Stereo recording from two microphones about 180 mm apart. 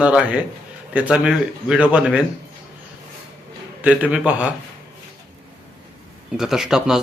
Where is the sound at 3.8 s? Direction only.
5° right (ahead or behind).